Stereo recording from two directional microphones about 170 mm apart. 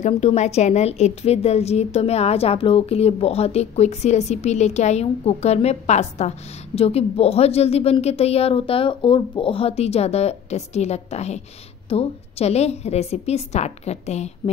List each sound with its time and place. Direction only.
0.0 s a woman's voice: 40° left (ahead or behind)